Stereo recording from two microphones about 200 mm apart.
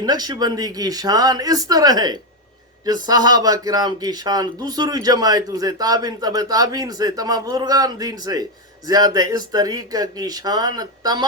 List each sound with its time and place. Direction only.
0.0 s speech: 20° right (ahead or behind)